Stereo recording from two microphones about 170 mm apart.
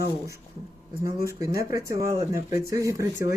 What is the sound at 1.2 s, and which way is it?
Speech, 20° right (ahead or behind).